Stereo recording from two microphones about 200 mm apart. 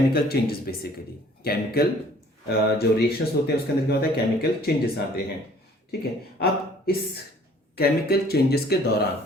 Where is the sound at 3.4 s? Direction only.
55° left (ahead or behind).